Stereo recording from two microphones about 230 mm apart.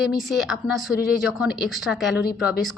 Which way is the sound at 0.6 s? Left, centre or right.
Left.